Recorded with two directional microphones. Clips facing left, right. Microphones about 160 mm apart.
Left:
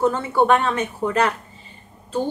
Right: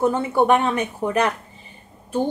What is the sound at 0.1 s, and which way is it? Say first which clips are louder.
A woman's voice: even; 15° right (ahead or behind).